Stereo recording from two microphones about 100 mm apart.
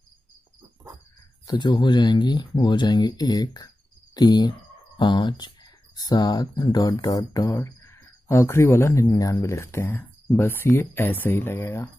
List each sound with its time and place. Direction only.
1.5 s speech: 50° left (ahead or behind); by 11.9 s 25° left (ahead or behind)